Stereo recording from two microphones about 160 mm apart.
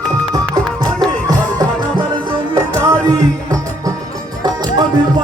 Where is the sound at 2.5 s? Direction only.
20° right (ahead or behind).